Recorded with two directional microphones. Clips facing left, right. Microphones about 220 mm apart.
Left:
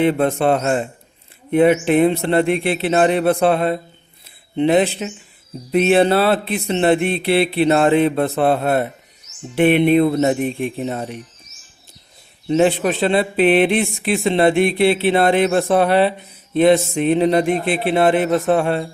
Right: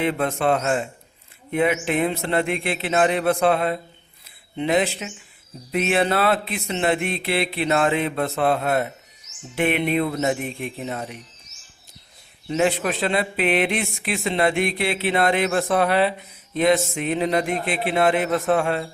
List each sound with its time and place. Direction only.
0.0 s a man's voice: 30° left (ahead or behind)
12.5 s a man's voice: 30° left (ahead or behind)